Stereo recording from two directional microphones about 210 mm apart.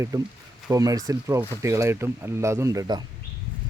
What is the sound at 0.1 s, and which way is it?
Speech, 15° right (ahead or behind).